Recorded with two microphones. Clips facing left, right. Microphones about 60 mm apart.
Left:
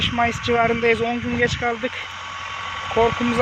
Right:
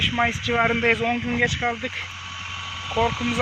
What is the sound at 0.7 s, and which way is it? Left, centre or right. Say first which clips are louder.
Speech: left 2 dB; centre.